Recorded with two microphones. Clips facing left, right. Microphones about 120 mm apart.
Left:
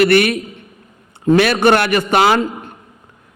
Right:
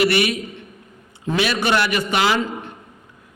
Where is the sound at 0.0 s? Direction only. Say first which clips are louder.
Left 6 dB; 55° left (ahead or behind).